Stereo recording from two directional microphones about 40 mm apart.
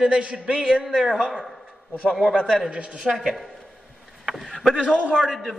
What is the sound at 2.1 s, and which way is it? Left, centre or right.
A man's voice, centre.